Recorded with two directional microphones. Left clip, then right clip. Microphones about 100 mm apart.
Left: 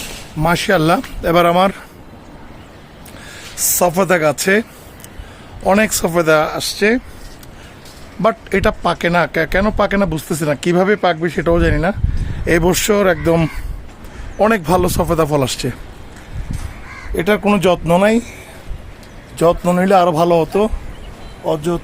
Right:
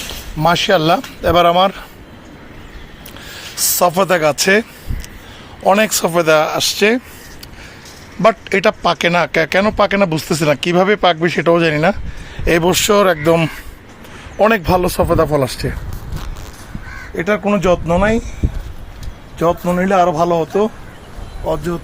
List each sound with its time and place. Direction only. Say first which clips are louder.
0.4 s speech: right 2 dB; 45° left (ahead or behind)
3.8 s speech: right 1 dB; 20° left (ahead or behind)
5.6 s speech: right 2 dB; 15° left (ahead or behind); by 7.0 s 5° right (ahead or behind)
8.2 s speech: right 3 dB; centre (ahead or behind)
12.5 s speech: right 1 dB; 20° left (ahead or behind)
15.4 s speech: even; 45° left (ahead or behind)
17.2 s speech: left 1 dB; 90° left
19.4 s speech: left 2 dB; 90° left; by 20.7 s 70° left (ahead or behind)
21.4 s speech: left 1 dB; 25° left (ahead or behind)